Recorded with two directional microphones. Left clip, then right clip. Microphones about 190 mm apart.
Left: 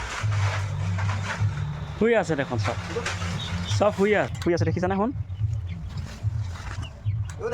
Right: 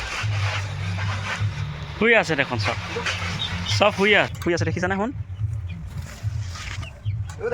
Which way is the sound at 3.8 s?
5° left (ahead or behind).